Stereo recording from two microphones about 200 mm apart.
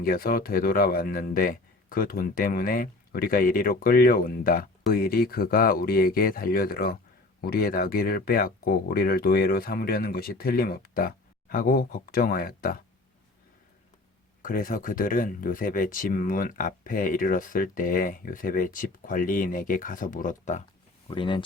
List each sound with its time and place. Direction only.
0.0 s speech: 45° left (ahead or behind)
14.4 s speech: 45° left (ahead or behind)
21.1 s speech: 25° left (ahead or behind)